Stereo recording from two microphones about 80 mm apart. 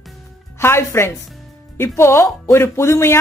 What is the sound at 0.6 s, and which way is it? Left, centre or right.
A woman's voice, left.